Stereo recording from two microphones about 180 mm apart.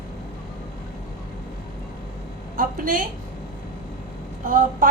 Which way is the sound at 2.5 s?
50° right (ahead or behind).